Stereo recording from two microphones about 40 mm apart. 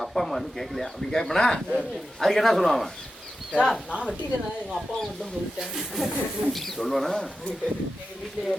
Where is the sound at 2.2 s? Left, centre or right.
Centre.